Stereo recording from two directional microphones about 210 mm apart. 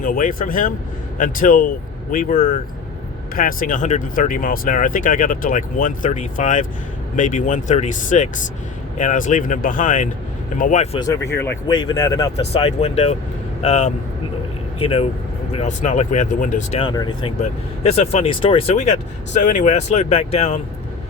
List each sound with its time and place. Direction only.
0.0 s speech: 40° left (ahead or behind)
11.3 s speech: 15° left (ahead or behind); by 16.8 s 35° left (ahead or behind)
16.8 s speech: 20° left (ahead or behind)